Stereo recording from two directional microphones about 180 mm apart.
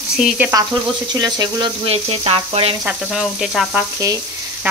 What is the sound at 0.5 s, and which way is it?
Speech, 25° right (ahead or behind).